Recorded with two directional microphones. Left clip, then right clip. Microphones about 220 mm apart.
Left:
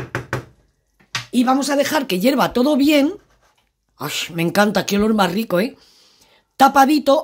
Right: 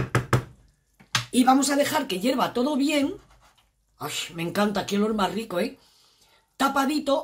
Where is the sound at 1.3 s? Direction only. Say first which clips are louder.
Left 3 dB; 35° left (ahead or behind).